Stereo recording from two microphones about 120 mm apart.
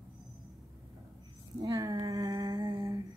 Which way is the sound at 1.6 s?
30° right (ahead or behind).